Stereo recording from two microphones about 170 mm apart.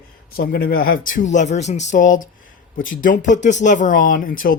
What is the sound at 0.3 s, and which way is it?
Speech, 60° left (ahead or behind).